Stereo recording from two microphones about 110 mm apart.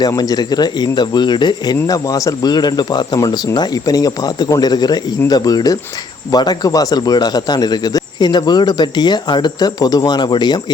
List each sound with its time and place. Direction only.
0.2 s a man's voice: 40° left (ahead or behind)